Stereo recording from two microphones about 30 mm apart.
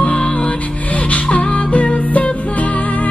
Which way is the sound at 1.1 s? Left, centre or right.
Left.